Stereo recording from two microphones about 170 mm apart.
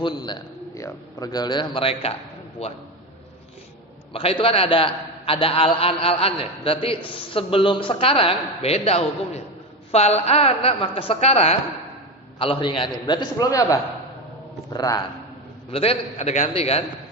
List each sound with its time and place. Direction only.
0.0 s a man's voice: 25° left (ahead or behind)
4.1 s a man's voice: 35° left (ahead or behind)
15.7 s a man's voice: 35° left (ahead or behind)